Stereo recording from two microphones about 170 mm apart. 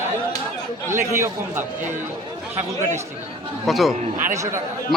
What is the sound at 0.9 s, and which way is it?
Speech, 15° right (ahead or behind).